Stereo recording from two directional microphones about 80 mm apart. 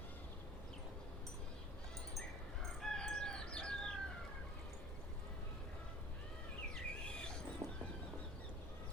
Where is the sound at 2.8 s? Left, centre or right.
Centre.